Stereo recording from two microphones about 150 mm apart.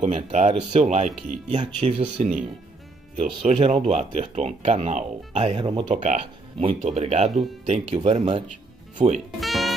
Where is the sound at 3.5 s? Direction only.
35° right (ahead or behind).